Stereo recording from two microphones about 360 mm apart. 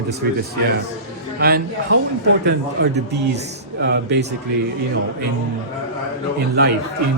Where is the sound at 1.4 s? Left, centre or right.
Right.